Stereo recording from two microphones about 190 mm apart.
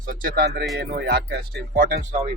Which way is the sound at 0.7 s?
60° right (ahead or behind).